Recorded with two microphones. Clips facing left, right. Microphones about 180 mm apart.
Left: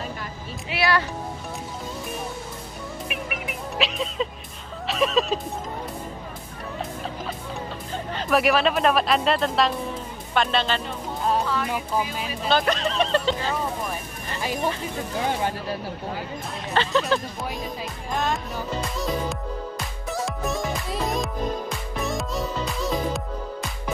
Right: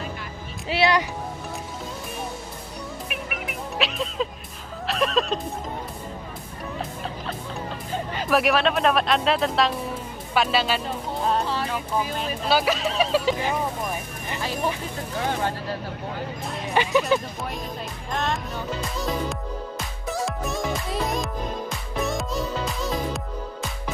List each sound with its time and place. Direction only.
0.7 s speech: 25° right (ahead or behind)
3.1 s music: centre (ahead or behind)
8.2 s speech: centre (ahead or behind)
12.4 s speech: 5° right (ahead or behind)
16.7 s speech: 15° right (ahead or behind)
18.1 s speech: centre (ahead or behind)
18.9 s music: centre (ahead or behind)